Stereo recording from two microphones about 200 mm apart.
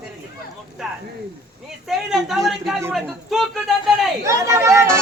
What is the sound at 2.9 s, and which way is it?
Speech, centre (ahead or behind).